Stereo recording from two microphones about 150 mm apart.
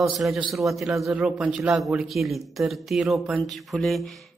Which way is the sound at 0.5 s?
Centre (ahead or behind).